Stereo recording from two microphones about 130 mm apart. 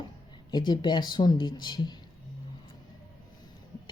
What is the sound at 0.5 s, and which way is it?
Speech, 35° left (ahead or behind).